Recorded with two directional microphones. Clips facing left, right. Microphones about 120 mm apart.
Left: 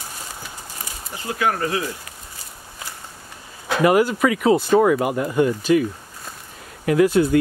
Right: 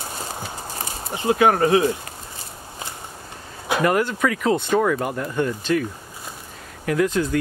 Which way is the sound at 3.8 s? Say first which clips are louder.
Left 4 dB; 5° left (ahead or behind).